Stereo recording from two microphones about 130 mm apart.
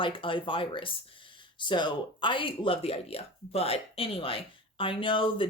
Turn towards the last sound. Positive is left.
turn(degrees=40)  # may be behind; listen again after turning